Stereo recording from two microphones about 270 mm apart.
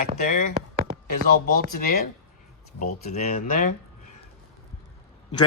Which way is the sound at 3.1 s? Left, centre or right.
Left.